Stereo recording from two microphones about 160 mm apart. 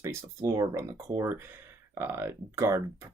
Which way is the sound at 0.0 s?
20° right (ahead or behind).